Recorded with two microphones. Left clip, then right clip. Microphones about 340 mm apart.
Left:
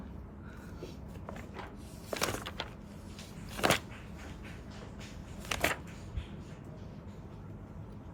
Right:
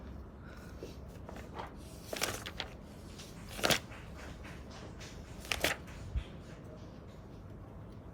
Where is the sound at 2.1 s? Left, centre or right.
Centre.